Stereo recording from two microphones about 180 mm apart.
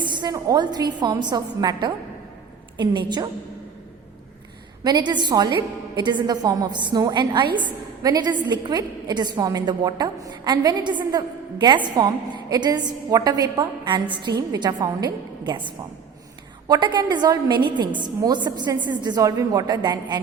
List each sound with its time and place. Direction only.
0.0 s a woman's voice: 25° right (ahead or behind)
4.8 s a woman's voice: 25° right (ahead or behind)